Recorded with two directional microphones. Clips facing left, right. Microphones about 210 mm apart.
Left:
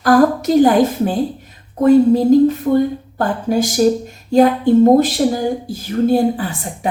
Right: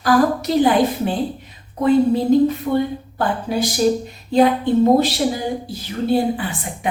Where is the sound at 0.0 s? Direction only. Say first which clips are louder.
Left 4 dB; 45° left (ahead or behind).